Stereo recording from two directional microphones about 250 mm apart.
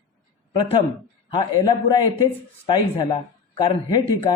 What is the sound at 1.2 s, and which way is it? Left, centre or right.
Speech, centre.